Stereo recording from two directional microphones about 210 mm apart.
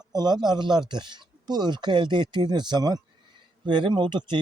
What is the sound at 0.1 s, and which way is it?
Speech, 20° right (ahead or behind).